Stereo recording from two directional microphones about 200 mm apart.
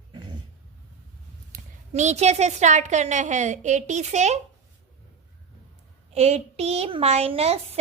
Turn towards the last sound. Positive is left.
turn(degrees=-30)  # may be behind; listen again after turning